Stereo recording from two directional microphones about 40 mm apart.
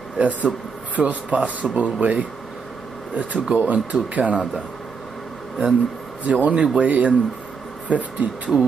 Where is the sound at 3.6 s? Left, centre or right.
Right.